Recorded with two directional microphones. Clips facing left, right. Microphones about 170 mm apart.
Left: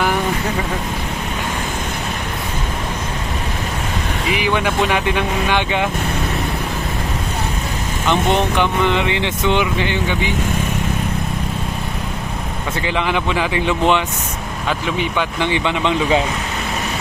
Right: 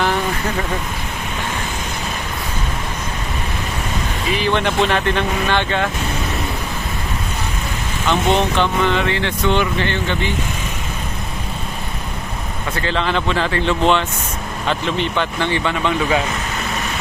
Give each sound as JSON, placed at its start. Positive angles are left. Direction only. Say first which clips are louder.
{"t": 4.3, "sound": "speech", "louder": "right 1 dB", "side_deg": 15}
{"t": 8.0, "sound": "speech", "louder": "even", "side_deg": 15}
{"t": 12.7, "sound": "speech", "louder": "even", "side_deg": 15}